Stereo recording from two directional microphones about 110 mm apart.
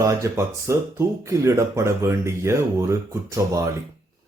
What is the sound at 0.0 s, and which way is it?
Speech, 30° right (ahead or behind).